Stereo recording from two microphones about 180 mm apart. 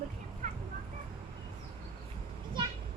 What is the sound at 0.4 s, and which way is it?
Vehicle, 45° right (ahead or behind).